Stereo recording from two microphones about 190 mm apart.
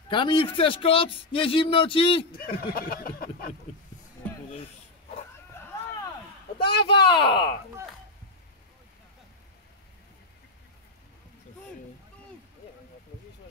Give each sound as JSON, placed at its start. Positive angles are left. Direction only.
{"t": 0.1, "sound": "a man's voice", "side_deg": 25}
{"t": 2.7, "sound": "a sound", "side_deg": 50}
{"t": 6.6, "sound": "speech", "side_deg": 60}
{"t": 7.2, "sound": "a man's voice", "side_deg": 25}